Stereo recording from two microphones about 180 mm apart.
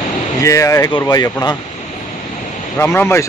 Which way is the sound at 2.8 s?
15° left (ahead or behind).